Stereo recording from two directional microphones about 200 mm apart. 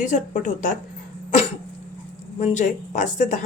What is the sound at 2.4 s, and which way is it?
Speech, 35° left (ahead or behind).